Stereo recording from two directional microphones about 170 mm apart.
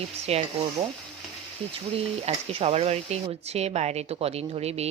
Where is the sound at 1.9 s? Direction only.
35° right (ahead or behind).